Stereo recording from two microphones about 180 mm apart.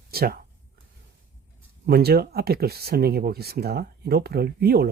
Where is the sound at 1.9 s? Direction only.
60° right (ahead or behind).